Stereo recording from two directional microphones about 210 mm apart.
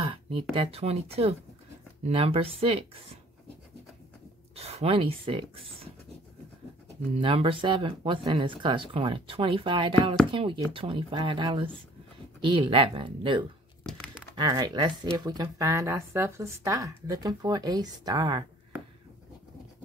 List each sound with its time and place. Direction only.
0.0 s speech: 25° right (ahead or behind)
4.6 s speech: 30° right (ahead or behind)
7.2 s speech: 25° right (ahead or behind)
13.8 s crumpling: 5° left (ahead or behind)
14.3 s speech: 20° right (ahead or behind)